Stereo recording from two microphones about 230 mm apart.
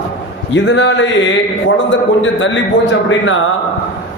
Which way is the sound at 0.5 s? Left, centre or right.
Left.